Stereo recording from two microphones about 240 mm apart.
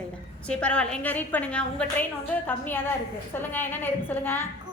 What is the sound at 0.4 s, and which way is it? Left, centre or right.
A woman's voice, centre.